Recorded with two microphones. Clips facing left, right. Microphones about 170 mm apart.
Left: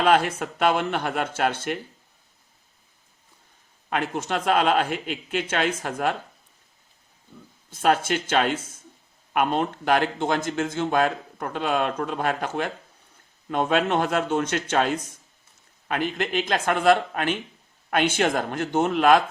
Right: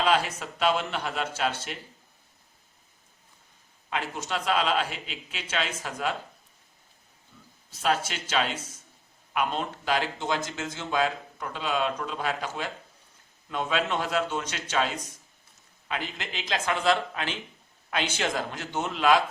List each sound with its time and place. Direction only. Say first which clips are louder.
0.0 s speech: left 5 dB; 55° left (ahead or behind)
3.8 s speech: left 6 dB; 55° left (ahead or behind)
7.7 s speech: left 6 dB; 50° left (ahead or behind)